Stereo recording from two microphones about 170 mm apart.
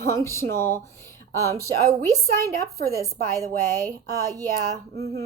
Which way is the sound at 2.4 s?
60° right (ahead or behind).